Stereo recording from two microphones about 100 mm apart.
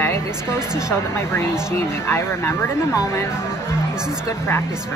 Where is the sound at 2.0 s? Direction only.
25° left (ahead or behind).